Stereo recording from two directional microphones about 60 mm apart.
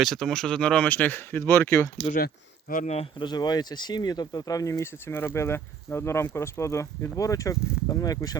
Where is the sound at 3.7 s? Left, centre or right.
Left.